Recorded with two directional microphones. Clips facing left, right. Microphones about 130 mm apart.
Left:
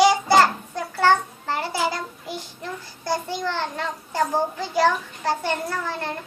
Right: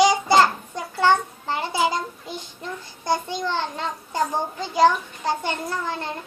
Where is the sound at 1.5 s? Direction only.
20° right (ahead or behind).